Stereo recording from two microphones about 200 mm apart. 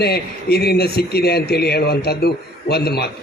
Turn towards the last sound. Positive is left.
turn(degrees=55)  # may be behind; listen again after turning